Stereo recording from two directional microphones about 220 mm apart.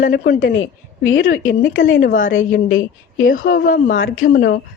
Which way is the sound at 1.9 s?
35° left (ahead or behind).